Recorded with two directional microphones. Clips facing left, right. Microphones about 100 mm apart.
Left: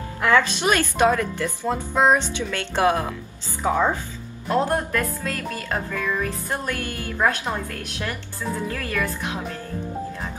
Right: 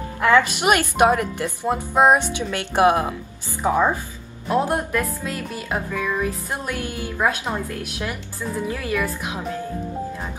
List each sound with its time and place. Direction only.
0.2 s speech: 15° right (ahead or behind)